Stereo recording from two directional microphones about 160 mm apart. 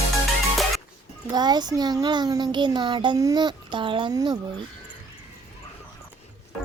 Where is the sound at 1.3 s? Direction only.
25° right (ahead or behind).